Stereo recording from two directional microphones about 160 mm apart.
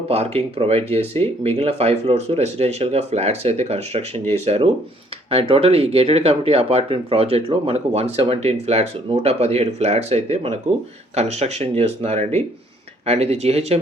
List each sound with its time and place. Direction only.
0.1 s speech: 40° right (ahead or behind)